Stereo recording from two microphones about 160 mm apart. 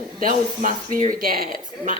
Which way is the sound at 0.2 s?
60° right (ahead or behind).